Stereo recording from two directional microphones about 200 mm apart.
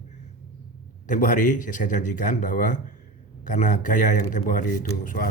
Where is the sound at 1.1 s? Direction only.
40° left (ahead or behind).